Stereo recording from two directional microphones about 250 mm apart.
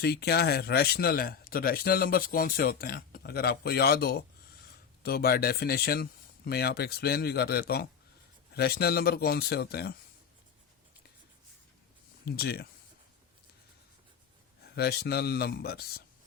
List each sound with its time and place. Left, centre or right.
0.0 s speech: left
12.2 s speech: left
14.8 s speech: left